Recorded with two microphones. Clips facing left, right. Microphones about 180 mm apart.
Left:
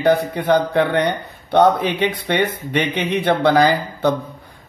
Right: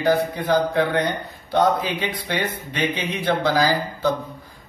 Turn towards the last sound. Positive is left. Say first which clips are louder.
# left 4 dB
turn(degrees=65)  # may be behind; listen again after turning